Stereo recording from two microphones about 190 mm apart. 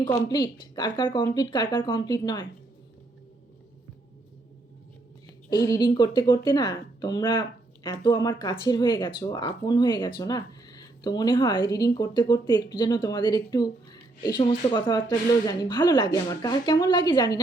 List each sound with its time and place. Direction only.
0.0 s speech: 20° left (ahead or behind)
5.5 s speech: 20° left (ahead or behind)